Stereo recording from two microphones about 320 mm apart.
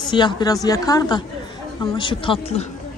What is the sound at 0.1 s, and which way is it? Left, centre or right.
Speech, centre.